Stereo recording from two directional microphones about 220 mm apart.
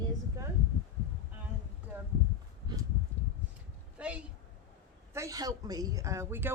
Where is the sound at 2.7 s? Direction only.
20° right (ahead or behind).